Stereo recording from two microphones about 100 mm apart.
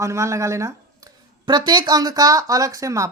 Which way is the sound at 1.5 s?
45° right (ahead or behind).